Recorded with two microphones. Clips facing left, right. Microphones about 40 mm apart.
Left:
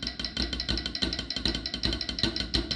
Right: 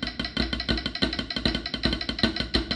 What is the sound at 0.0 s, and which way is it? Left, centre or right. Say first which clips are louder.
Music: right 5 dB; right.